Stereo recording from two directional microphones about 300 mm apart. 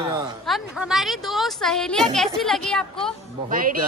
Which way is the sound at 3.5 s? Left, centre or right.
Right.